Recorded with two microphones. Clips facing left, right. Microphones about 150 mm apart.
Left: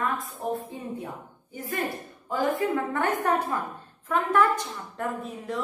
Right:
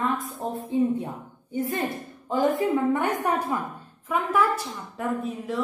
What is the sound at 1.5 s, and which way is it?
A woman's voice, 25° right (ahead or behind).